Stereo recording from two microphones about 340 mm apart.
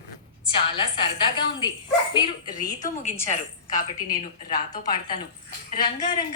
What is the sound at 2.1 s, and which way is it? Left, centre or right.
Speech, centre.